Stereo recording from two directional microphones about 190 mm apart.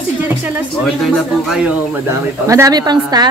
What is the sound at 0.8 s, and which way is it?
A woman's voice, centre (ahead or behind).